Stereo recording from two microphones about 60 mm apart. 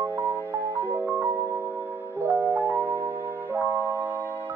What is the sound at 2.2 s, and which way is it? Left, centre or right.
Music, right.